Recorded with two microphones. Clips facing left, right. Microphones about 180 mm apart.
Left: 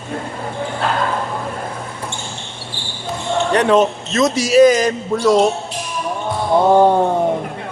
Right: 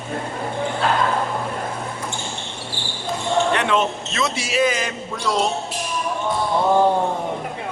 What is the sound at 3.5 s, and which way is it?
A man's voice, 40° left (ahead or behind).